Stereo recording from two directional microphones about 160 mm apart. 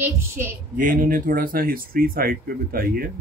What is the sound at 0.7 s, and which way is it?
Speech, 55° right (ahead or behind).